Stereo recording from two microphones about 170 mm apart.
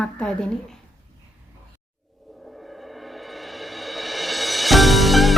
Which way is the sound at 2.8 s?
Centre (ahead or behind).